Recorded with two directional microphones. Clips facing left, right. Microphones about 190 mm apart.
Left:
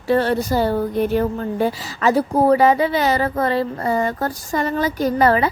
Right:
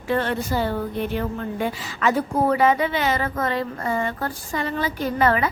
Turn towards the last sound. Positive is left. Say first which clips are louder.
# left 4 dB
turn(degrees=35)  # may be behind; listen again after turning